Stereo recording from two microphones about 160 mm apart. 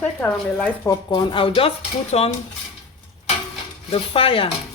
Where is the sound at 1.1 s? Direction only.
30° left (ahead or behind).